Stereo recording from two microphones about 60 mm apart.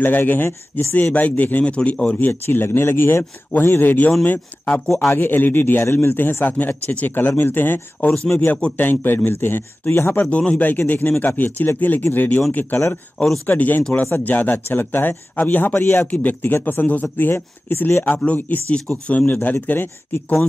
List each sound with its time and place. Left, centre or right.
0.0 s speech: left
2.2 s a man's voice: left
4.9 s a man's voice: left
8.5 s speech: left
9.0 s a man's voice: left
10.3 s speech: centre
10.6 s a man's voice: left
13.6 s a man's voice: left